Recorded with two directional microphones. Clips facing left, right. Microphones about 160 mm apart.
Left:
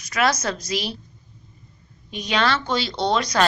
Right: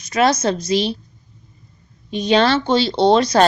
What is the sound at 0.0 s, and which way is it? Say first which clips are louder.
Speech: right 6 dB; 25° right (ahead or behind).